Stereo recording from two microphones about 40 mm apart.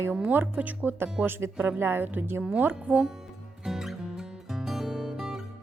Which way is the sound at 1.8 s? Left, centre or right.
Right.